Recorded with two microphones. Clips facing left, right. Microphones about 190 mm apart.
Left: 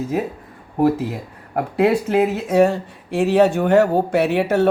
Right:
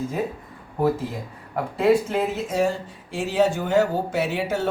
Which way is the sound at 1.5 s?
65° left (ahead or behind).